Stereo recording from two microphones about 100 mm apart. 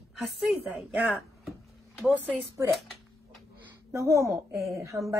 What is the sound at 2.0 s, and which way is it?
Speech, 10° left (ahead or behind).